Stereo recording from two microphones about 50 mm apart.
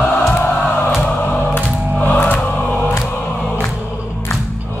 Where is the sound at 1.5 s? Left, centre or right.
Left.